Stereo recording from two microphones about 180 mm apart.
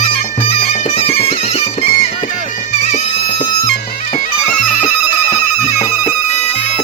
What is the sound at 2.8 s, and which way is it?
Music, 35° left (ahead or behind).